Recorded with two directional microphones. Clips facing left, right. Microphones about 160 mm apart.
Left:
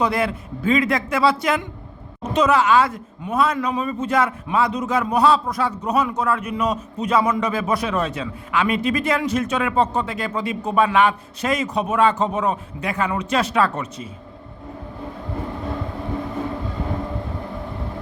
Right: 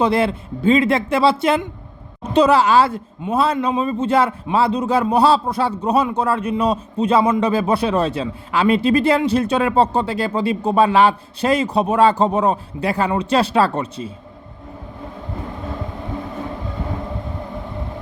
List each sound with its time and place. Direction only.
0.0 s a man's voice: 30° right (ahead or behind)